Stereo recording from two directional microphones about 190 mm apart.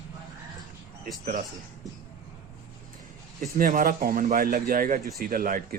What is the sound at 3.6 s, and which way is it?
Speech, 45° right (ahead or behind).